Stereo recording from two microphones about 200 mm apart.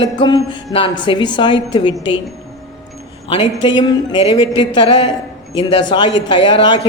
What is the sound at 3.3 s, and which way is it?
Speech, 25° left (ahead or behind).